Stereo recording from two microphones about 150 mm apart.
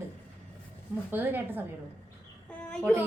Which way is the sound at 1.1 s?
15° right (ahead or behind).